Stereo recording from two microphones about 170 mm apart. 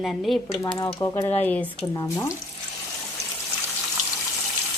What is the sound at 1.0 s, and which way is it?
Speech, 20° left (ahead or behind).